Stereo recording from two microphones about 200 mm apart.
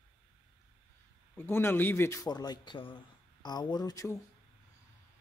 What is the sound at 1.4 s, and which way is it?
Speech, 10° left (ahead or behind).